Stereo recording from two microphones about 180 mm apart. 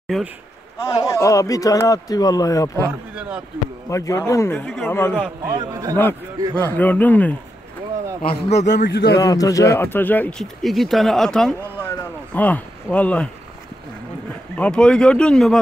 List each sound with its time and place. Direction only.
0.7 s a man's voice: 15° left (ahead or behind)
3.2 s speech: 5° right (ahead or behind)
3.9 s speech: 15° left (ahead or behind)
5.1 s speech: 5° right (ahead or behind)
5.5 s a man's voice: 20° right (ahead or behind)
6.5 s speech: 10° left (ahead or behind)
8.2 s a man's voice: 40° left (ahead or behind)
8.7 s a man's voice: 65° left (ahead or behind)
9.2 s speech: 20° left (ahead or behind)
14.6 s speech: 5° left (ahead or behind)